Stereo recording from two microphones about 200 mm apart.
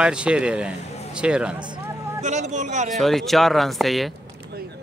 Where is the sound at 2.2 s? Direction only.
35° right (ahead or behind).